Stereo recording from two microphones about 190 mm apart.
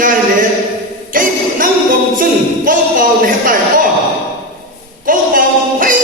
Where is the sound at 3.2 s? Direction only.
45° right (ahead or behind).